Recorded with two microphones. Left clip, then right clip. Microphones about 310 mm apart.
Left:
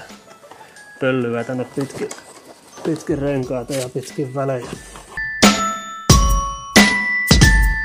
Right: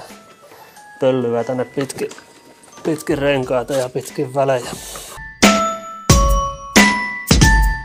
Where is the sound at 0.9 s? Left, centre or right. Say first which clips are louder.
Right 3 dB; right.